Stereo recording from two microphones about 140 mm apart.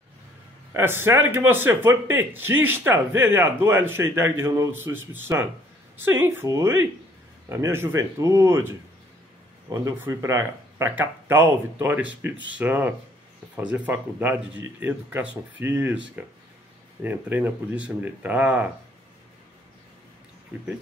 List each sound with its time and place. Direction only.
0.7 s speech: 15° right (ahead or behind)